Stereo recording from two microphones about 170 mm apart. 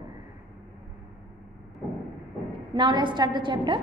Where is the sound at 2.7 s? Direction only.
30° right (ahead or behind).